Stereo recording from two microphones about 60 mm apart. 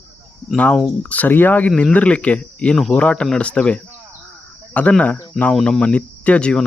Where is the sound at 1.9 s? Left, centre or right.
Left.